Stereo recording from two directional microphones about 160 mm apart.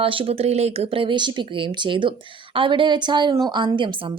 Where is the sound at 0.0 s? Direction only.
35° right (ahead or behind).